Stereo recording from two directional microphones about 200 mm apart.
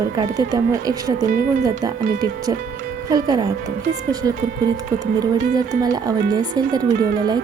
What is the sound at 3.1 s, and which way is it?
Speech, 20° right (ahead or behind).